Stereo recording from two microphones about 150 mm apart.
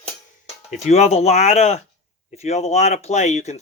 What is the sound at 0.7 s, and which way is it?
Speech, 45° left (ahead or behind).